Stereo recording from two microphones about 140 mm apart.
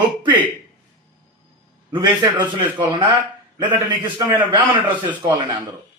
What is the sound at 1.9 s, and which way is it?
A man's voice, 35° right (ahead or behind).